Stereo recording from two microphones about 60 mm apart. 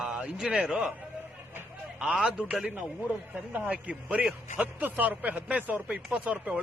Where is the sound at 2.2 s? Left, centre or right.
Centre.